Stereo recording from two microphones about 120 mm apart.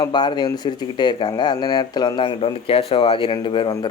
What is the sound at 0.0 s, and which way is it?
A man's voice, 35° left (ahead or behind).